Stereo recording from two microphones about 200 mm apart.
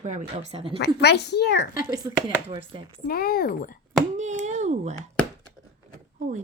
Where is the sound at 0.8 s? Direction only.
55° left (ahead or behind).